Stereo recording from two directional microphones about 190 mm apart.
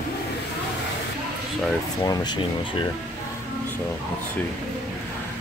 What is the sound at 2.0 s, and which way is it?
Speech, 25° left (ahead or behind).